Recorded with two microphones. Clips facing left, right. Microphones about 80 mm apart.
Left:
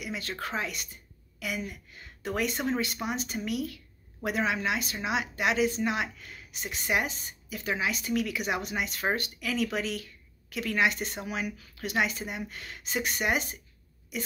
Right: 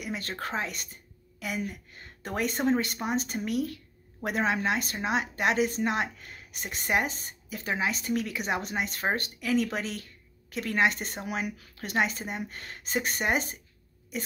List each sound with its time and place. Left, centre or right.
0.0 s a woman's voice: right